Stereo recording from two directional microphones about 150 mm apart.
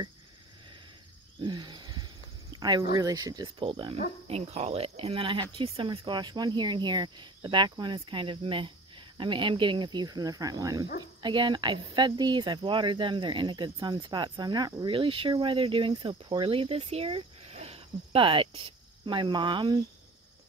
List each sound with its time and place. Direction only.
1.4 s wild animals: 30° right (ahead or behind)
2.5 s speech: 25° right (ahead or behind)